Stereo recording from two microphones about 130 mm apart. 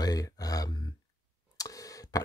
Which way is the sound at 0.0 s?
30° left (ahead or behind).